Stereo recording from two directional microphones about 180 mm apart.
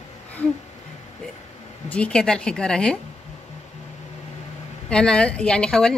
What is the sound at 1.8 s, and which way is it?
A woman's voice, 5° left (ahead or behind).